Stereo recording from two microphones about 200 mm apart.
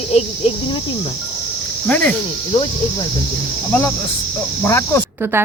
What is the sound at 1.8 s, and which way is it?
Speech, 5° left (ahead or behind).